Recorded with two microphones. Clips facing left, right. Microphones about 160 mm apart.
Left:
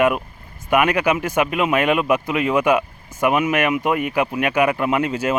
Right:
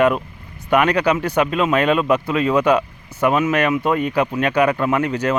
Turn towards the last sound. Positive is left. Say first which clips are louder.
# right 1 dB
turn(degrees=20)  # may be behind; listen again after turning